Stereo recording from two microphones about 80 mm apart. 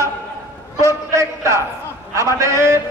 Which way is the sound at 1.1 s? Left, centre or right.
Right.